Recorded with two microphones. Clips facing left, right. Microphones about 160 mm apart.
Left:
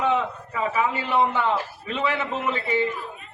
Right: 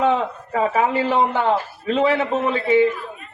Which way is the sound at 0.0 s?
45° right (ahead or behind).